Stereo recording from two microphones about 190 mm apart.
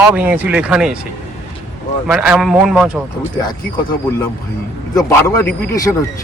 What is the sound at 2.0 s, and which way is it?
Speech, 5° right (ahead or behind).